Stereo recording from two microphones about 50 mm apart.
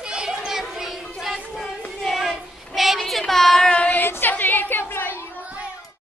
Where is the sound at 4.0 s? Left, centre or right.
Left.